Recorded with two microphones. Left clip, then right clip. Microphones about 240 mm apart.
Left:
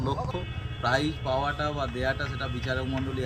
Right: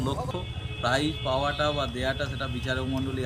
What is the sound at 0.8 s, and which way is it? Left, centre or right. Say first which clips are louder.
Speech: even; centre.